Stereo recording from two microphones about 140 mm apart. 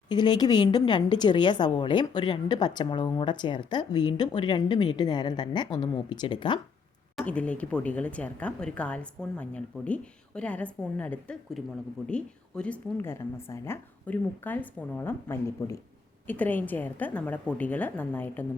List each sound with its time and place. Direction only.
0.1 s speech: 30° left (ahead or behind)
7.2 s speech: 10° left (ahead or behind)